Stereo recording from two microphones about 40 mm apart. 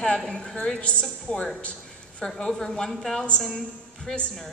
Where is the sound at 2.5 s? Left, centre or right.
Centre.